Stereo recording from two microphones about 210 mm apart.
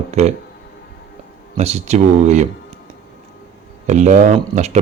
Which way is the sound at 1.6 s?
30° right (ahead or behind).